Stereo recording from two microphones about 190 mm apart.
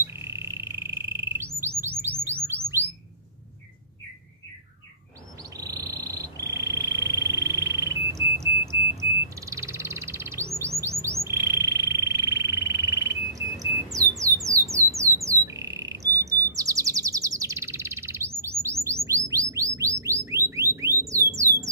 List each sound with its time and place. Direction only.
0.0 s squawk: 15° right (ahead or behind)
1.6 s bird: 15° right (ahead or behind)
2.0 s music: 10° right (ahead or behind)
5.6 s frog: 20° right (ahead or behind)
9.3 s bird: 15° right (ahead or behind)
19.0 s a sound: 15° right (ahead or behind)